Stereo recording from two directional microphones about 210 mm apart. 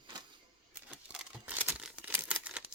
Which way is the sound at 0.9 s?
5° right (ahead or behind).